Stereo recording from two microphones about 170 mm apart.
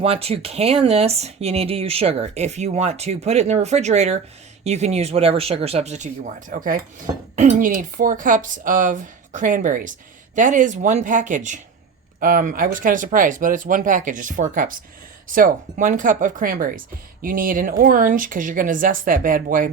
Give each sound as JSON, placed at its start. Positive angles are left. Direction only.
{"t": 0.0, "sound": "a woman's voice", "side_deg": -35}